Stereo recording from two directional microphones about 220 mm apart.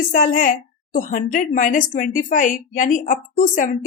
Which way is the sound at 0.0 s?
35° left (ahead or behind).